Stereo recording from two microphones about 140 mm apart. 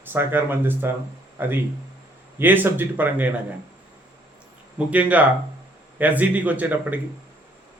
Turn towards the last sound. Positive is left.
turn(degrees=-10)  # may be behind; listen again after turning